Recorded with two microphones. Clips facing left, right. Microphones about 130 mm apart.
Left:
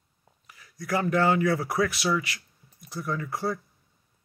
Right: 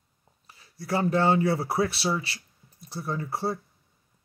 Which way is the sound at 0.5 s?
30° right (ahead or behind).